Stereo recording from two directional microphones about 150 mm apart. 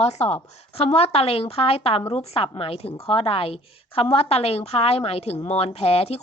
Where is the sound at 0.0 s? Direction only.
45° left (ahead or behind).